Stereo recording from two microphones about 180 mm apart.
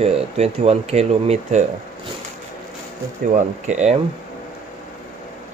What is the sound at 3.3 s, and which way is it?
Speech, 40° right (ahead or behind).